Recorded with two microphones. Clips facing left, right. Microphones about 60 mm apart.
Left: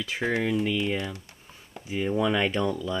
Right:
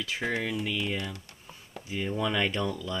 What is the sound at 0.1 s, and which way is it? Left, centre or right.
Speech, centre.